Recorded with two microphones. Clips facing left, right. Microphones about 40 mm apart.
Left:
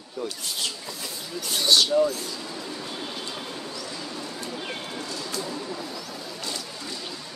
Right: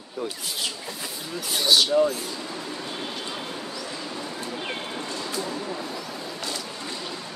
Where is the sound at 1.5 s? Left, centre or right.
Centre.